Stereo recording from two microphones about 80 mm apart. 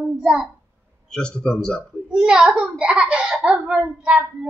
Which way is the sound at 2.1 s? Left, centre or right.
Centre.